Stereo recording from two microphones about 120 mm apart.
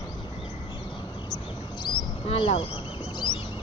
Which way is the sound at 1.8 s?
45° left (ahead or behind).